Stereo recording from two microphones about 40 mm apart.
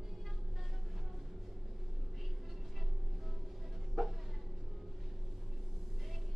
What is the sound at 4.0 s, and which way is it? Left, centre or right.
Vehicle, centre.